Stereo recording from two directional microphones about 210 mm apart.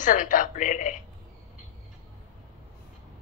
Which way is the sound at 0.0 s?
40° left (ahead or behind).